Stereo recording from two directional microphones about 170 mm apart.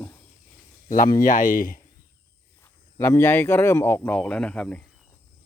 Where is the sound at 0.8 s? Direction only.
50° left (ahead or behind).